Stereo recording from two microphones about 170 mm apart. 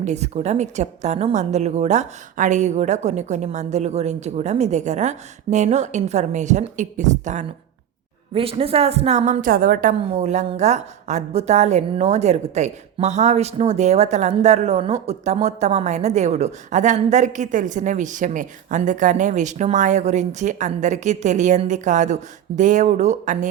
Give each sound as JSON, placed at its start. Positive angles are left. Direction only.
{"t": 0.0, "sound": "a woman's voice", "side_deg": -40}
{"t": 8.3, "sound": "a woman's voice", "side_deg": -35}
{"t": 10.1, "sound": "a woman's voice", "side_deg": -40}